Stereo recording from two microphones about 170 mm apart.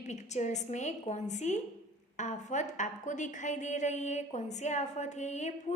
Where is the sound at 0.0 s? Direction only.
45° left (ahead or behind).